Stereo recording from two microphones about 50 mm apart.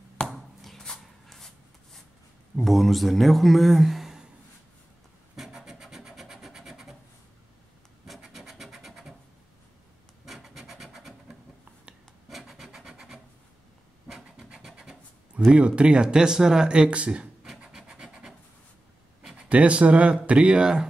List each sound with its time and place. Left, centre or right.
0.6 s a sound: centre
2.5 s speech: centre
5.3 s wood: centre
8.3 s scratch: centre
10.2 s rub: centre
10.6 s wood: centre
12.3 s rub: centre
14.0 s scratch: centre
15.5 s speech: right
17.0 s writing: centre
17.6 s wood: centre
19.3 s speech: right